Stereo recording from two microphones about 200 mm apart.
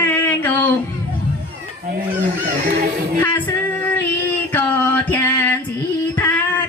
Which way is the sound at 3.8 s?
10° left (ahead or behind).